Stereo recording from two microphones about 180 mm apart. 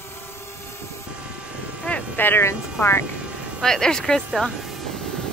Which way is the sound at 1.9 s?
10° left (ahead or behind).